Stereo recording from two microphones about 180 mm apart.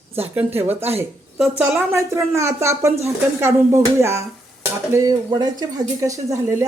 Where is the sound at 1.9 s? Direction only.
15° right (ahead or behind).